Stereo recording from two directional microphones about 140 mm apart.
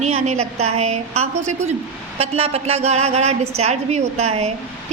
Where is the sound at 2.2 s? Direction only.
45° right (ahead or behind).